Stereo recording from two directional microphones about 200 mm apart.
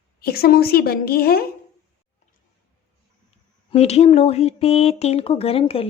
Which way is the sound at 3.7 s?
30° left (ahead or behind).